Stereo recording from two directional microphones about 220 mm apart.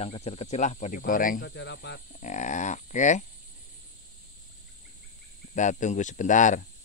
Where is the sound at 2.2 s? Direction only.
35° left (ahead or behind).